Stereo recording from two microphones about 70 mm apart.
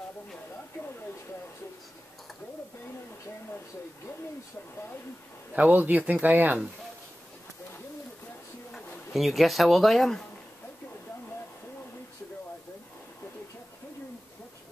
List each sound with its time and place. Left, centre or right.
5.5 s a man's voice: right
9.1 s speech: centre